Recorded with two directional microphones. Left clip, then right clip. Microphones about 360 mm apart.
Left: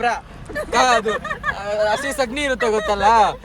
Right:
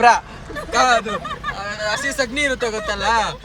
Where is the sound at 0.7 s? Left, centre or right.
Centre.